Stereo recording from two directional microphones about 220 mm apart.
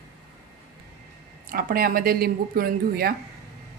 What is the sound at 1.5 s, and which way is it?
A woman's voice, 40° right (ahead or behind).